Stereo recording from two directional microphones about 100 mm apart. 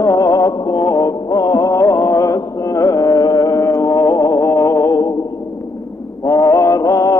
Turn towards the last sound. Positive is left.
turn(degrees=35)  # may be behind; listen again after turning